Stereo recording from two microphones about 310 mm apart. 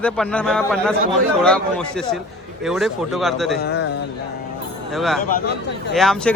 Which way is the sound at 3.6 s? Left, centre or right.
Left.